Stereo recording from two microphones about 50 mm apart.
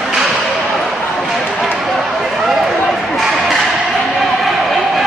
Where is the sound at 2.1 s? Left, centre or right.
Centre.